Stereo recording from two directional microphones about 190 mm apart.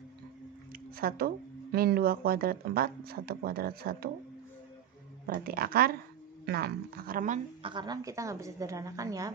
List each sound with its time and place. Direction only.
0.9 s speech: 50° right (ahead or behind)
5.2 s speech: 50° right (ahead or behind)
7.6 s a woman's voice: 25° right (ahead or behind)